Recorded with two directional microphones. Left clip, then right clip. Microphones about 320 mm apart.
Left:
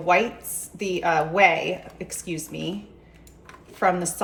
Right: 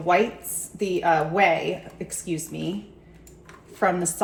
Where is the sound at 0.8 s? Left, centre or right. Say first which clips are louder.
Right 1 dB; centre.